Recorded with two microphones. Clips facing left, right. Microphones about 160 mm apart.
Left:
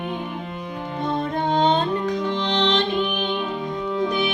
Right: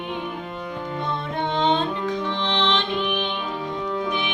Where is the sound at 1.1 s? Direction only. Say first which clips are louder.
Left 5 dB; 40° left (ahead or behind).